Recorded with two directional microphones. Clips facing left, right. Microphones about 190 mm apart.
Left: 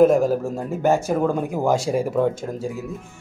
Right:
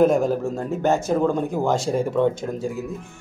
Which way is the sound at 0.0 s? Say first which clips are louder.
Left 2 dB; 5° left (ahead or behind).